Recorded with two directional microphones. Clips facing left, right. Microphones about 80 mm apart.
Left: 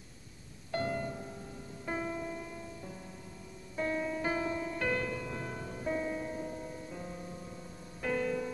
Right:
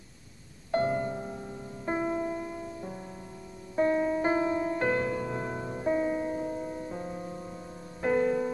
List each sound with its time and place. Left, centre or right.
0.7 s music: right